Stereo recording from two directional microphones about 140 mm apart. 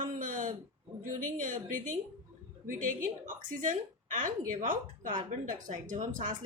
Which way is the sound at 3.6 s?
65° right (ahead or behind).